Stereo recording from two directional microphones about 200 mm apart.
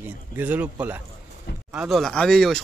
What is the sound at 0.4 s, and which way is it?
Speech, 5° right (ahead or behind).